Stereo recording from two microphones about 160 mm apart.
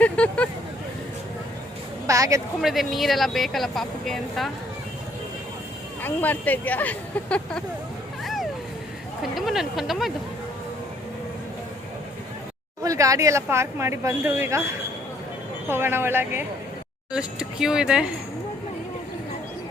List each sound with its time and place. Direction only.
0.0 s vehicle: 10° left (ahead or behind)
2.0 s a woman's voice: 20° right (ahead or behind)
2.6 s speech: centre (ahead or behind)
6.0 s speech: 10° left (ahead or behind)
8.2 s vehicle: centre (ahead or behind)
9.2 s speech: centre (ahead or behind)
12.8 s speech: 20° right (ahead or behind)
15.7 s speech: 15° right (ahead or behind)